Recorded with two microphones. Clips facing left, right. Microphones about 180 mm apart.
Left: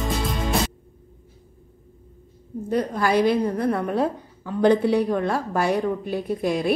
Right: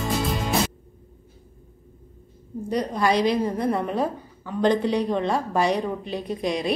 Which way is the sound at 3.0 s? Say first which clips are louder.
Left 1 dB; centre (ahead or behind).